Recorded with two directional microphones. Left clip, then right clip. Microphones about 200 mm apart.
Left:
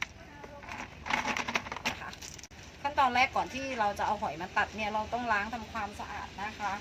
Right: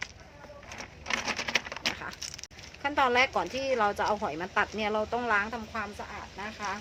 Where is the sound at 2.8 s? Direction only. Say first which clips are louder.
Right 2 dB; 45° right (ahead or behind).